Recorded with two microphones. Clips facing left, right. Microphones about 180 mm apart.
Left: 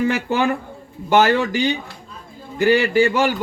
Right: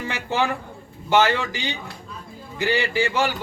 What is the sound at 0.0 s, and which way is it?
A man's voice, 50° left (ahead or behind).